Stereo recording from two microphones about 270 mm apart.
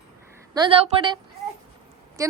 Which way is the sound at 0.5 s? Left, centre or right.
Centre.